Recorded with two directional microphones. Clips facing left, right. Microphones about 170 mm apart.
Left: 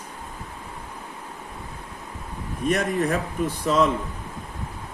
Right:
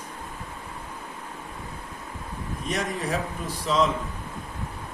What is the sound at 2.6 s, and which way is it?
A man's voice, 55° left (ahead or behind).